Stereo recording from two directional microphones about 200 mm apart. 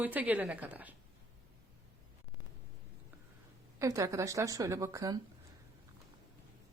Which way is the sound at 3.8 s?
15° right (ahead or behind).